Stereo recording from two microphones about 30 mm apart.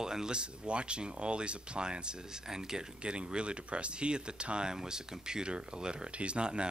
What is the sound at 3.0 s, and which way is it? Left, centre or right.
Speech, right.